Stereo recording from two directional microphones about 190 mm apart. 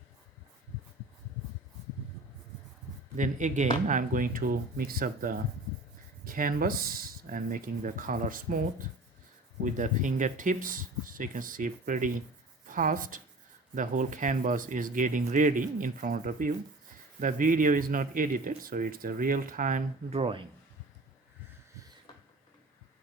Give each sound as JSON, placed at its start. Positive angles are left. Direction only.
{"t": 3.2, "sound": "a man's voice", "side_deg": -40}
{"t": 9.6, "sound": "a man's voice", "side_deg": -40}